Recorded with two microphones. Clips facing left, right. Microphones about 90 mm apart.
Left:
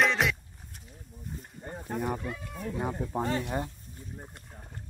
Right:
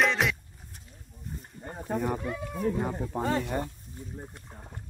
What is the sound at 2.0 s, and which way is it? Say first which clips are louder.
Speech: right 2 dB; centre (ahead or behind).